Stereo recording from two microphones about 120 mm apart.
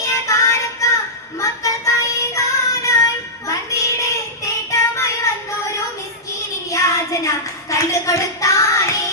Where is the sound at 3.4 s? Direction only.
25° left (ahead or behind).